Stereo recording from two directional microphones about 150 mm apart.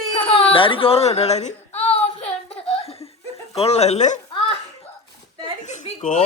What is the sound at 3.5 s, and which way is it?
Speech, 40° left (ahead or behind).